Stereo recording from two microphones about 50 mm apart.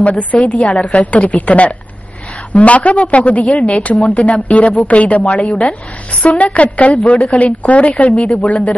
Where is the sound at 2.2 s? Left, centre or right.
Centre.